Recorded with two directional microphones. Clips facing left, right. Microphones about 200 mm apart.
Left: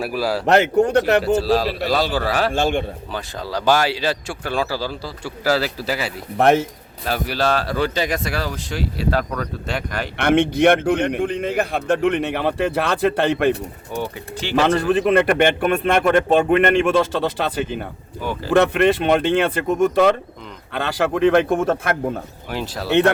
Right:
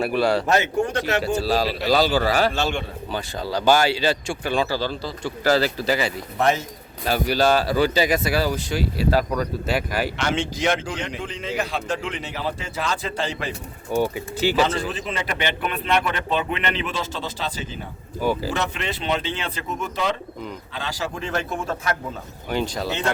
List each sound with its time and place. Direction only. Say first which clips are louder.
0.0 s speech: right 2 dB; centre (ahead or behind)
0.4 s a man's voice: left 6 dB; 65° left (ahead or behind)
1.5 s speech: left 2 dB; centre (ahead or behind)
2.5 s a man's voice: left 5 dB; 50° left (ahead or behind)
3.1 s speech: even; centre (ahead or behind)
6.3 s a man's voice: left 7 dB; 55° left (ahead or behind)
7.0 s speech: right 2 dB; centre (ahead or behind)
10.2 s a man's voice: left 9 dB; 60° left (ahead or behind)
14.0 s speech: right 6 dB; 10° right (ahead or behind)
14.6 s a man's voice: left 6 dB; 55° left (ahead or behind)
22.4 s speech: right 3 dB; 5° left (ahead or behind)
22.9 s a man's voice: left 13 dB; 60° left (ahead or behind)